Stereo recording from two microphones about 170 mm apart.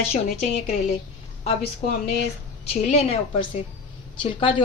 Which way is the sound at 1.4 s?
35° left (ahead or behind).